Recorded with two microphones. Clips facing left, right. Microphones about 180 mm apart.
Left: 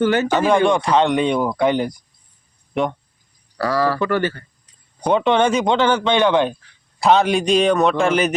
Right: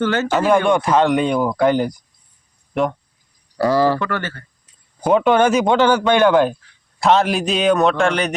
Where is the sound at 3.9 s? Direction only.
15° left (ahead or behind).